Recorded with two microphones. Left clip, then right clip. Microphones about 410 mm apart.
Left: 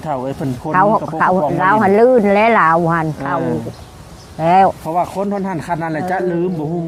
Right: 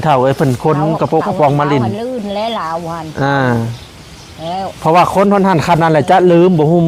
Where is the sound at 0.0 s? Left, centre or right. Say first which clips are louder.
Right 10 dB; right.